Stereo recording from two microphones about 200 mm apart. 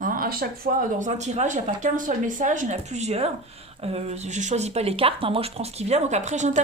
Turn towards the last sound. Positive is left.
turn(degrees=-35)  # may be behind; listen again after turning